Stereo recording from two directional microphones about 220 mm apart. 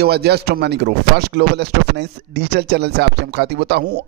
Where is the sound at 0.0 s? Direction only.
45° right (ahead or behind).